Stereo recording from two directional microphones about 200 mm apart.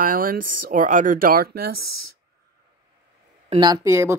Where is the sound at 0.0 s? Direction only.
45° right (ahead or behind).